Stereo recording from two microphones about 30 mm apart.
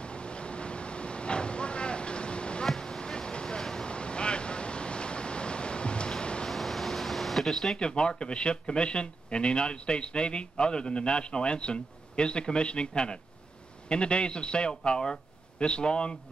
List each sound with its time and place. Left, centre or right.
0.0 s vehicle: left
2.8 s a sound: left
3.8 s waves: left
6.5 s air conditioning: centre
7.7 s speech: left
14.9 s speech: left